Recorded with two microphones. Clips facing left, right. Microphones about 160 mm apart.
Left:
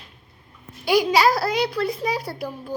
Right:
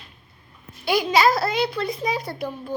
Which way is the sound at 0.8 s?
10° left (ahead or behind).